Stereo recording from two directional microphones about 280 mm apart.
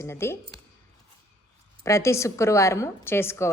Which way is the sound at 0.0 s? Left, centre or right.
Centre.